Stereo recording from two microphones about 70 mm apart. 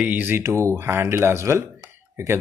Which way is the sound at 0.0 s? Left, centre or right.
Right.